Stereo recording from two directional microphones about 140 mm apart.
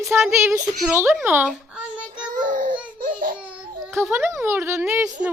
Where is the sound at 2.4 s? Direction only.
65° right (ahead or behind).